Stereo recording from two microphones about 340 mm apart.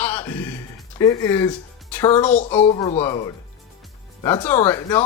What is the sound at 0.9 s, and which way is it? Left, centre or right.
Speech, centre.